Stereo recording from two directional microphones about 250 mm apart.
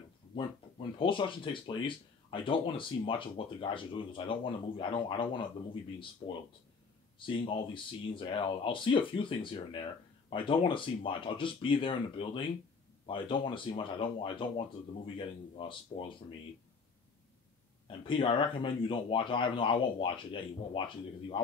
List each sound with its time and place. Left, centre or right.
0.4 s speech: left
7.2 s speech: centre
17.8 s speech: left